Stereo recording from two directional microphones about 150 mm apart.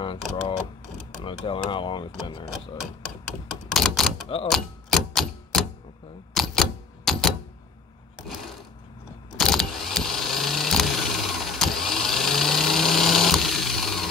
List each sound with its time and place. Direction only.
0.0 s speech: 35° left (ahead or behind)
2.8 s speech: centre (ahead or behind)
4.5 s typewriter: centre (ahead or behind)
8.2 s sewing machine: 5° right (ahead or behind)
9.4 s vehicle: centre (ahead or behind)